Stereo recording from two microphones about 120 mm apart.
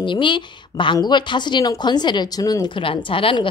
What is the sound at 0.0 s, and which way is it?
A woman's voice, 40° left (ahead or behind).